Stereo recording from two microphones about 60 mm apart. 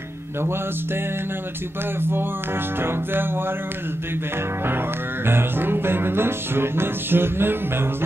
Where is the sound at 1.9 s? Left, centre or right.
Right.